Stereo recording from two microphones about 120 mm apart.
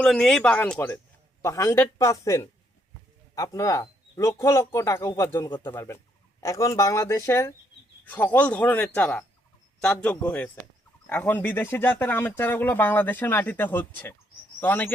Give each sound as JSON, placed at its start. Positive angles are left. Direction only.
{"t": 0.0, "sound": "speech", "side_deg": 5}
{"t": 1.4, "sound": "speech", "side_deg": 25}